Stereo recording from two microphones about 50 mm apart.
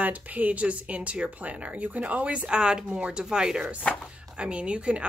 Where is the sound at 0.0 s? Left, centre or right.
Right.